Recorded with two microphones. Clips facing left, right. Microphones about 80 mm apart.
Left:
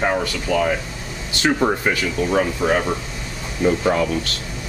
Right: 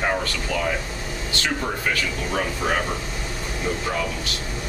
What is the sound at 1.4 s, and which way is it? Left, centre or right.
Speech, left.